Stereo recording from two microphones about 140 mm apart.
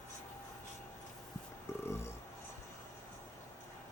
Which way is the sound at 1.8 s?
20° left (ahead or behind).